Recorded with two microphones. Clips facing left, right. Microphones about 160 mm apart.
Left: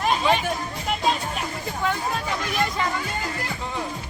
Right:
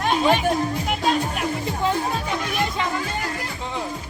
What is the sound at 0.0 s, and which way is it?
Music, centre (ahead or behind).